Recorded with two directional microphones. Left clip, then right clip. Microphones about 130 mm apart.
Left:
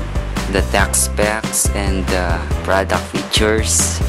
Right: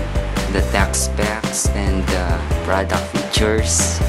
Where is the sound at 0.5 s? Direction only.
20° left (ahead or behind).